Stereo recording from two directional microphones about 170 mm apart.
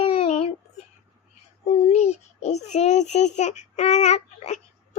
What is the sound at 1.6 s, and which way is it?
Child singing, 40° left (ahead or behind).